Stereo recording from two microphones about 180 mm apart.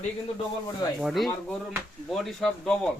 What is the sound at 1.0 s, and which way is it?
Speech, centre (ahead or behind).